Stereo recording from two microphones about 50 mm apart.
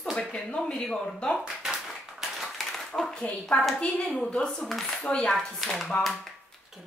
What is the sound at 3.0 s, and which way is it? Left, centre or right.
Speech, centre.